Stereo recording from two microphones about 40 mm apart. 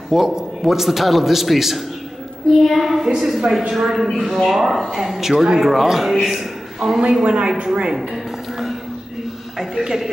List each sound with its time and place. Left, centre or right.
0.1 s a man's voice: centre
7.2 s speech: right
8.1 s music: centre
9.6 s a man's voice: centre